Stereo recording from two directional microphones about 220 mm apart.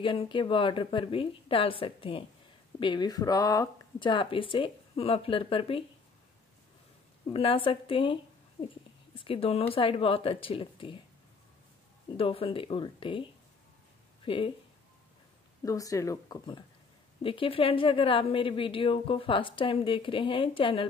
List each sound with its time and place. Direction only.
0.0 s speech: 20° left (ahead or behind)
7.3 s speech: 25° left (ahead or behind)
12.2 s speech: 25° left (ahead or behind)
14.2 s speech: 25° left (ahead or behind)
15.6 s speech: 15° left (ahead or behind)